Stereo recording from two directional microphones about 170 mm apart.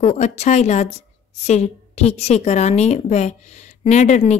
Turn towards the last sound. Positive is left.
turn(degrees=45)  # may be behind; listen again after turning